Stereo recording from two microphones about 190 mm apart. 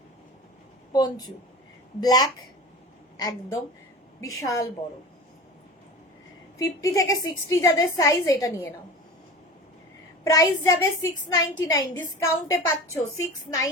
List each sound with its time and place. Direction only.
0.9 s a woman's voice: 20° left (ahead or behind)
6.6 s a woman's voice: 20° left (ahead or behind)
10.2 s a woman's voice: 15° left (ahead or behind)